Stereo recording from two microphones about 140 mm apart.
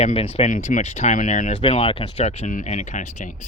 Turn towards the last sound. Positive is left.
turn(degrees=65)  # may be behind; listen again after turning